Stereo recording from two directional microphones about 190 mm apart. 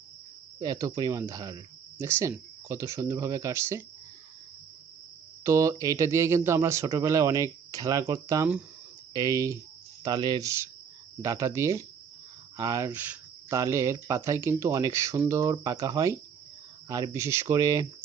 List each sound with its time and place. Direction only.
0.6 s speech: 20° right (ahead or behind)
5.4 s speech: 15° right (ahead or behind)